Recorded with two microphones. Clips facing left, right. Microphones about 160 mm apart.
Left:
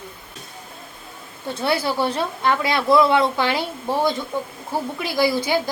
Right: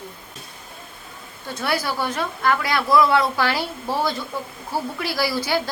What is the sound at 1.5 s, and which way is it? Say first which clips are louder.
A woman's voice: left 3 dB; 25° left (ahead or behind).